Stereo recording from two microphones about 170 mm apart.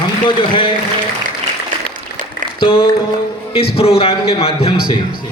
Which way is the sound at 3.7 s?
35° left (ahead or behind).